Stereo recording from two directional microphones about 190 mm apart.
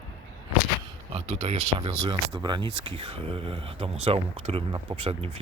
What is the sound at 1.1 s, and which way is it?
Speech, 30° right (ahead or behind).